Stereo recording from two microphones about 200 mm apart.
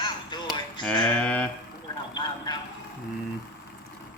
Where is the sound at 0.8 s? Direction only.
5° left (ahead or behind).